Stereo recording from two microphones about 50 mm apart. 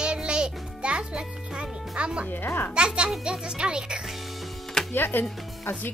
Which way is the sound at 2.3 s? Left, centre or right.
Left.